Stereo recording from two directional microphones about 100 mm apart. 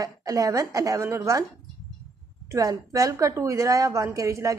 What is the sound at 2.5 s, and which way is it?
A woman's voice, 35° right (ahead or behind).